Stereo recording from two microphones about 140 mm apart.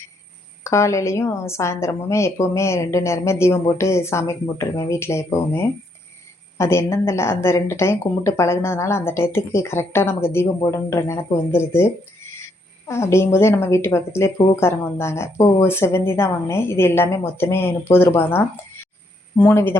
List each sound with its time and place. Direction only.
0.6 s a woman's voice: 20° left (ahead or behind)
12.9 s a woman's voice: 20° left (ahead or behind)